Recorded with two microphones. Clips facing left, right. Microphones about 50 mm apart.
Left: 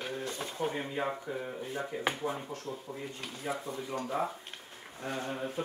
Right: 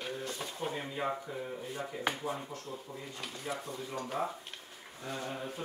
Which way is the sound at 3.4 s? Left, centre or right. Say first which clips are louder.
Left 4 dB; centre.